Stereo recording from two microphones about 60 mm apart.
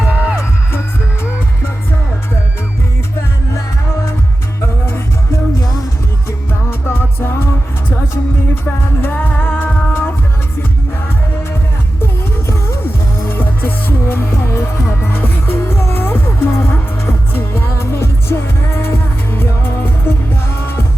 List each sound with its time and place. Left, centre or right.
0.0 s music: centre
4.6 s music: left
6.5 s music: left
12.5 s music: left